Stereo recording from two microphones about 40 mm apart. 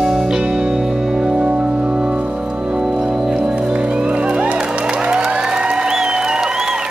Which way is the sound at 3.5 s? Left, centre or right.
Right.